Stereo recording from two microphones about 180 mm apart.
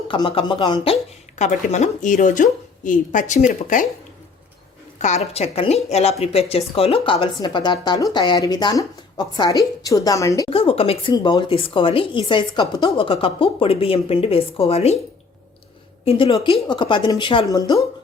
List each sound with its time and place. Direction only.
0.1 s a woman's voice: 30° left (ahead or behind)
1.4 s a woman's voice: 40° left (ahead or behind)
4.9 s a woman's voice: 40° left (ahead or behind); by 10.5 s 20° left (ahead or behind)
10.5 s speech: 30° left (ahead or behind)
16.0 s a woman's voice: 30° left (ahead or behind)